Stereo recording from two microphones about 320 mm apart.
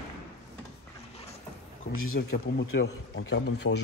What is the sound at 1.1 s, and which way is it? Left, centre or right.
Vehicle, centre.